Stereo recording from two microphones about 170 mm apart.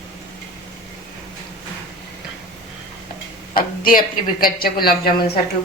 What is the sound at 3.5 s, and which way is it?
Speech, 60° left (ahead or behind).